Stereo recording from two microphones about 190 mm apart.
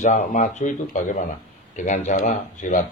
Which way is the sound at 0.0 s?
40° left (ahead or behind).